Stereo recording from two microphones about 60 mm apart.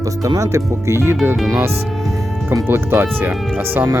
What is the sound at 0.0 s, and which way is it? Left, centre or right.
Speech, right.